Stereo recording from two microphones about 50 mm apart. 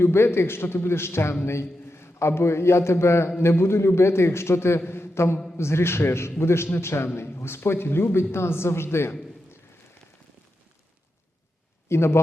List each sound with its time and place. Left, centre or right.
0.0 s a man's voice: left
4.9 s a sound: left
5.5 s a man's voice: left
11.9 s a man's voice: left